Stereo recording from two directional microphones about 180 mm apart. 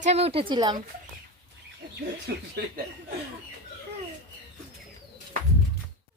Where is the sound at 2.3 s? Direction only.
65° right (ahead or behind).